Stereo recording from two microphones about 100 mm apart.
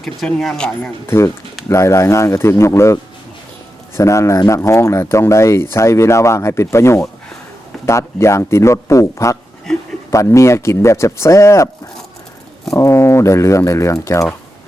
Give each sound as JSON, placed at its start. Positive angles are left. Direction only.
{"t": 0.3, "sound": "speech", "side_deg": 5}
{"t": 1.0, "sound": "speech", "side_deg": 25}
{"t": 12.7, "sound": "speech", "side_deg": 30}